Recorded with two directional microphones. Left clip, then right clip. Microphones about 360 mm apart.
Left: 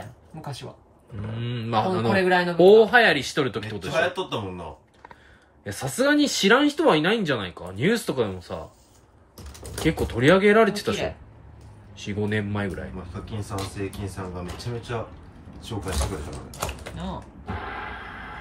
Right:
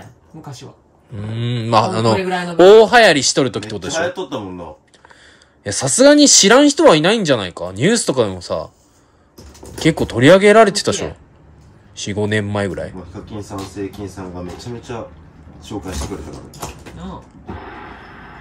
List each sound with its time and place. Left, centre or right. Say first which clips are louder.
1.3 s speech: right 10 dB; centre
2.5 s a man's voice: right 8 dB; right
2.8 s speech: right 8 dB; centre
5.6 s speech: right 12 dB; centre
9.8 s speech: right 9 dB; centre